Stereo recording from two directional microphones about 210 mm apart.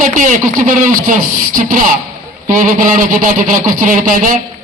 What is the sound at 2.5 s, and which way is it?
A man's voice, 40° right (ahead or behind).